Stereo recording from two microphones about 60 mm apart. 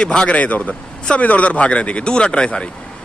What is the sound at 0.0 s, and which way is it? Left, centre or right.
A man's voice, centre.